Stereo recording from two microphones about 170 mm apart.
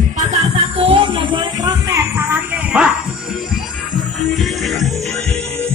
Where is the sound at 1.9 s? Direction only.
15° right (ahead or behind).